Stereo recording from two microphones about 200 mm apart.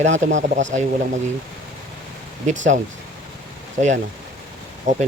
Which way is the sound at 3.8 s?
35° right (ahead or behind).